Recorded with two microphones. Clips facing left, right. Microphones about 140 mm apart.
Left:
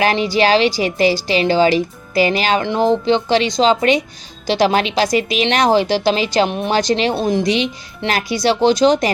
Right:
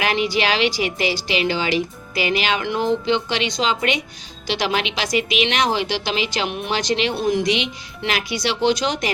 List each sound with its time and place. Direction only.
0.0 s a woman's voice: 35° left (ahead or behind)